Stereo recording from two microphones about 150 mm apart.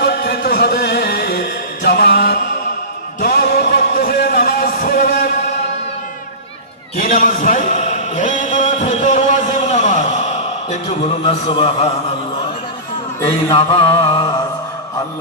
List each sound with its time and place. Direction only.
0.0 s music: 90° left
3.2 s a sound: 90° left; by 5.2 s 75° left (ahead or behind)
7.0 s chant: 60° left (ahead or behind)
10.7 s speech: 45° left (ahead or behind)
11.4 s mantra: 35° left (ahead or behind)
13.6 s mantra: 35° left (ahead or behind)